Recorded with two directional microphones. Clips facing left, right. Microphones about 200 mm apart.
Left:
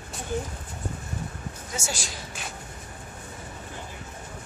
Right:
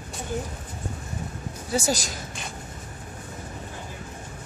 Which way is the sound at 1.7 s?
35° right (ahead or behind).